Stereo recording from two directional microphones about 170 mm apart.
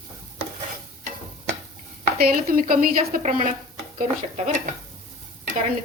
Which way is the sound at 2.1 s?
55° right (ahead or behind).